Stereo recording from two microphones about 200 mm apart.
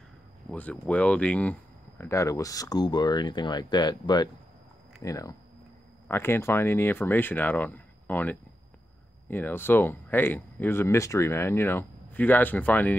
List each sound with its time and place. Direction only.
0.5 s speech: 5° left (ahead or behind)